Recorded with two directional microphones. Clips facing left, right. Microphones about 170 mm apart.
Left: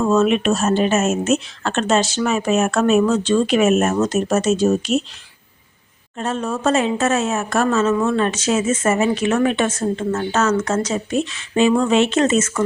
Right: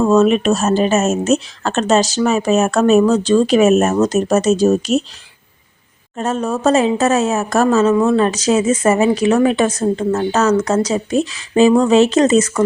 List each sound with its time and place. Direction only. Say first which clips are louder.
0.0 s speech: right 4 dB; 40° right (ahead or behind)
6.1 s speech: right 4 dB; 40° right (ahead or behind)